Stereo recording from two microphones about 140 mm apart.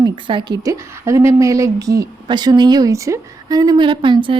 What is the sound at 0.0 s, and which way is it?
A woman's voice, 35° right (ahead or behind).